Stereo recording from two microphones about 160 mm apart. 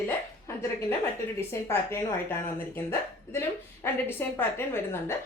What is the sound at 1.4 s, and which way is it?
A woman's voice, 15° left (ahead or behind).